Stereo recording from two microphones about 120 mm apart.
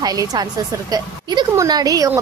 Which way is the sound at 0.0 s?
30° right (ahead or behind).